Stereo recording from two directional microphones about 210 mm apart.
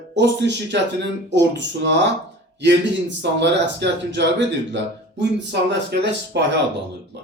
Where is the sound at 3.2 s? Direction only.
55° right (ahead or behind).